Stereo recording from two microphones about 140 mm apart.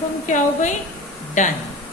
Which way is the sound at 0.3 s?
60° left (ahead or behind).